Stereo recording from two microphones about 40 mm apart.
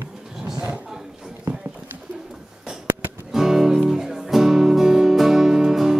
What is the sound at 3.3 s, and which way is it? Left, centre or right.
Music, centre.